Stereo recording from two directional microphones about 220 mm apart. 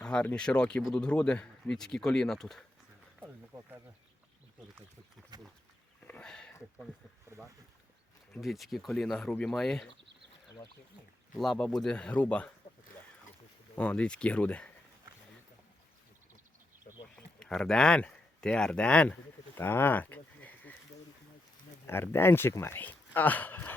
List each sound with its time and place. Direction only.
0.0 s speech: 5° left (ahead or behind)
3.2 s a sound: 10° right (ahead or behind)
5.3 s speech: 20° right (ahead or behind)
6.1 s speech: 5° left (ahead or behind)
8.3 s speech: centre (ahead or behind)
11.3 s speech: centre (ahead or behind)
13.7 s speech: 5° left (ahead or behind)
17.2 s speech: 5° left (ahead or behind)
19.5 s livestock: 10° left (ahead or behind)
21.8 s speech: 10° left (ahead or behind)